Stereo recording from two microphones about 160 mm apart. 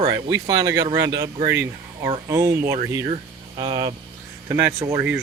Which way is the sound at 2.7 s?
30° right (ahead or behind).